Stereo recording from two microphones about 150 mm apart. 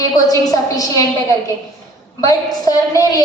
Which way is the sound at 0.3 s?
25° left (ahead or behind).